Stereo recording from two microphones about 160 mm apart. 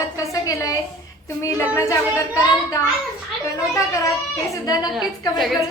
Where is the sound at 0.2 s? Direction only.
20° left (ahead or behind).